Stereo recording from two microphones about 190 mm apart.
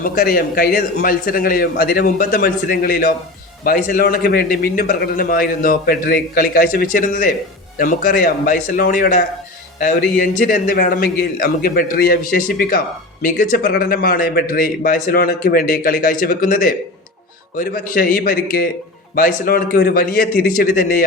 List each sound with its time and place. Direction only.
0.0 s a man's voice: 50° left (ahead or behind)
10.4 s a man's voice: 50° left (ahead or behind)